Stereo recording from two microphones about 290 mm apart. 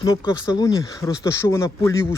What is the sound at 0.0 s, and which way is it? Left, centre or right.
Speech, centre.